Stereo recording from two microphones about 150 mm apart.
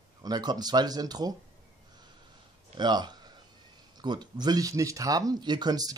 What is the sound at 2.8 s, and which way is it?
Speech, 30° right (ahead or behind).